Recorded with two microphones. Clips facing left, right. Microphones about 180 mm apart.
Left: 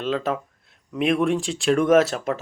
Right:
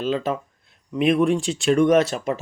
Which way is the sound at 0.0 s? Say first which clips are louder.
Right 1 dB; centre (ahead or behind).